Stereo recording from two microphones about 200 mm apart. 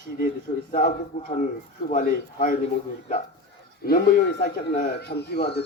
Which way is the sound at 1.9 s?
45° left (ahead or behind).